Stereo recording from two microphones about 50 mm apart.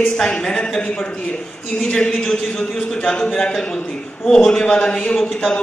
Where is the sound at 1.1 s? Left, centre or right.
Left.